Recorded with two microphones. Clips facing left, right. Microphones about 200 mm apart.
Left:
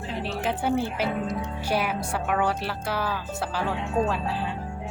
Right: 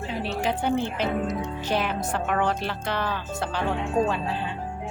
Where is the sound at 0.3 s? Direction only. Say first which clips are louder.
Right 1 dB; 5° left (ahead or behind).